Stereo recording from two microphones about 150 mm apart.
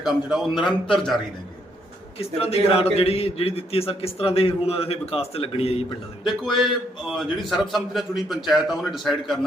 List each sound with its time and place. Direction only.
0.0 s a man's voice: centre (ahead or behind)
2.1 s a man's voice: 40° left (ahead or behind)
6.2 s a man's voice: centre (ahead or behind)